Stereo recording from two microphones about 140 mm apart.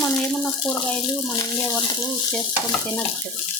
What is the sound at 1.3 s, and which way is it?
Speech, 25° left (ahead or behind).